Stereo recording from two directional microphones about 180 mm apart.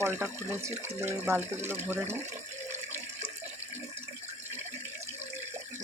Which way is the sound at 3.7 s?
15° right (ahead or behind).